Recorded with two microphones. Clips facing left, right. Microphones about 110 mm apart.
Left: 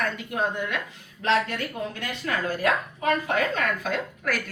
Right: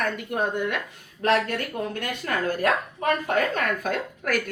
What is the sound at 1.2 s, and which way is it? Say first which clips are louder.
Speech: right 1 dB; 50° right (ahead or behind).